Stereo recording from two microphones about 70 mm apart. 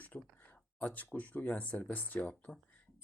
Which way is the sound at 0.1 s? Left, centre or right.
Left.